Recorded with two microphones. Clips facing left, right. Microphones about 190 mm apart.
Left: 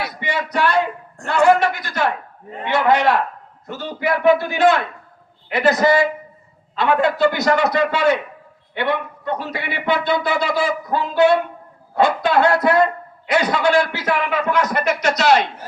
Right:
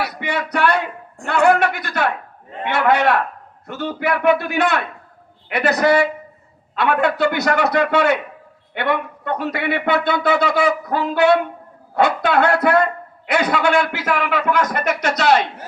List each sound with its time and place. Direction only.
0.2 s a man's voice: 60° right (ahead or behind)